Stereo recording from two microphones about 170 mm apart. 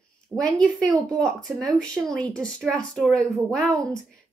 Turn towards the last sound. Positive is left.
turn(degrees=5)  # may be behind; listen again after turning